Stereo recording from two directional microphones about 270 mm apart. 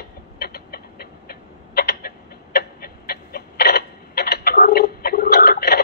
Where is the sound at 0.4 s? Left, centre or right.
Left.